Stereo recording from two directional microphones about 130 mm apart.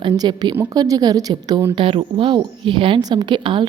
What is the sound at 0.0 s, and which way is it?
A woman's voice, 35° right (ahead or behind).